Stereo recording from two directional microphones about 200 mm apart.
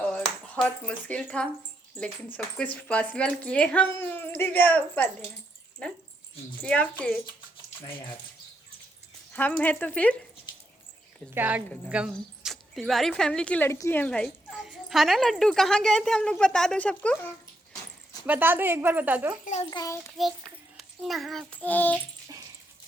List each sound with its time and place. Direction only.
0.1 s speech: 5° left (ahead or behind)
9.3 s speech: 5° left (ahead or behind)
11.3 s speech: 10° right (ahead or behind)
18.3 s speech: 10° right (ahead or behind)
19.7 s speech: 15° left (ahead or behind)
20.1 s a child's voice: centre (ahead or behind)